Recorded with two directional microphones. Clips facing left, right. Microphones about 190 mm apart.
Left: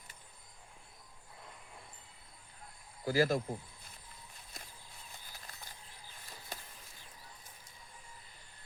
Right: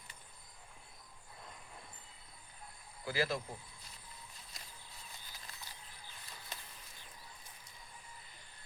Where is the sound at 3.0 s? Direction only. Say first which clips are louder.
Left 6 dB; 45° left (ahead or behind).